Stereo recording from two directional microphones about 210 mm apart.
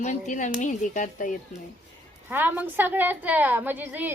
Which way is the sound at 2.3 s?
10° right (ahead or behind).